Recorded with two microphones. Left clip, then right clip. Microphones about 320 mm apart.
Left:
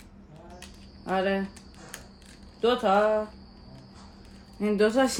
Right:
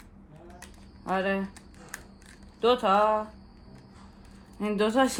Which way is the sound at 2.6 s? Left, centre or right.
Centre.